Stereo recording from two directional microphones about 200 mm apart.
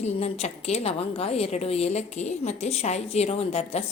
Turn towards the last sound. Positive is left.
turn(degrees=30)  # may be behind; listen again after turning